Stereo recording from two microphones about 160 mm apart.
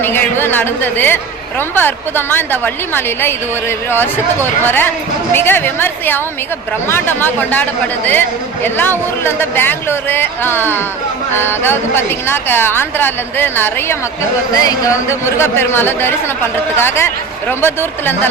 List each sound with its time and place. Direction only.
0.0 s a woman's voice: 15° left (ahead or behind)